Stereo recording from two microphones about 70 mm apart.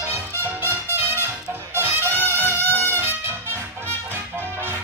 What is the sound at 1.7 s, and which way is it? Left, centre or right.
Music, right.